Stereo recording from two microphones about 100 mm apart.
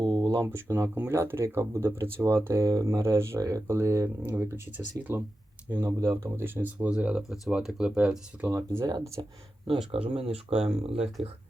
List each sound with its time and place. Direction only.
0.0 s a sound: 50° right (ahead or behind)
0.3 s speech: 30° right (ahead or behind); by 8.4 s 10° right (ahead or behind)
8.4 s speech: 25° right (ahead or behind)
9.9 s speech: 75° right (ahead or behind)